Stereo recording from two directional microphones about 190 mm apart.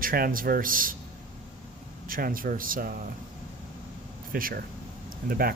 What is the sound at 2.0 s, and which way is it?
Speech, 50° right (ahead or behind).